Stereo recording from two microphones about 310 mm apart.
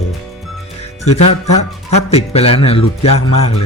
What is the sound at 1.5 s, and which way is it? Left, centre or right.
Speech, left.